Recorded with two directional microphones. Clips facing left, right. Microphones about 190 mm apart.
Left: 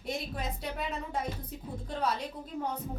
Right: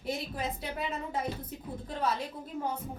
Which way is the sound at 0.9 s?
5° right (ahead or behind).